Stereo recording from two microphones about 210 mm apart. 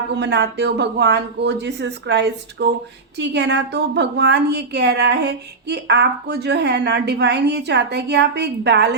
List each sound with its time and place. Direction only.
0.2 s a woman's voice: 55° right (ahead or behind)